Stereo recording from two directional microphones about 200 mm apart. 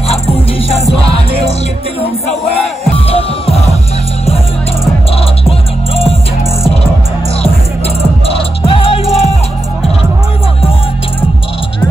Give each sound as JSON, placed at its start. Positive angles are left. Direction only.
{"t": 2.5, "sound": "music", "side_deg": 30}
{"t": 8.3, "sound": "music", "side_deg": 30}